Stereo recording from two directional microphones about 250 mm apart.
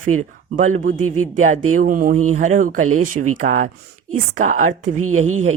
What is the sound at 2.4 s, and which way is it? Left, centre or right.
Speech, right.